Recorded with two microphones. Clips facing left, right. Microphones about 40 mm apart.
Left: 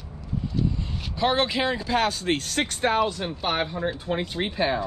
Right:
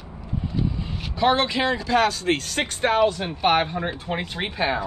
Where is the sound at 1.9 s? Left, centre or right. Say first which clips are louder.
Right 4 dB; right.